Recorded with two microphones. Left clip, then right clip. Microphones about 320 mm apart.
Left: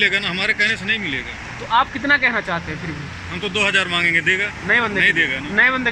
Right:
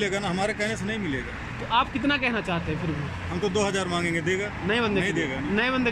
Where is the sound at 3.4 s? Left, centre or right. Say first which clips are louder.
Left 8 dB; centre.